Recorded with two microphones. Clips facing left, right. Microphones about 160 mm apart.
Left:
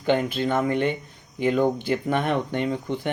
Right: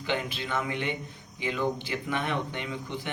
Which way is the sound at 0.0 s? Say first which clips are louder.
Left 9 dB; 50° left (ahead or behind).